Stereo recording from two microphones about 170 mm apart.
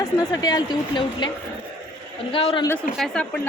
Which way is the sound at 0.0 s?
20° left (ahead or behind).